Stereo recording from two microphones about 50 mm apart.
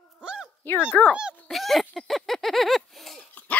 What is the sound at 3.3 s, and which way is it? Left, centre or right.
Dog, left.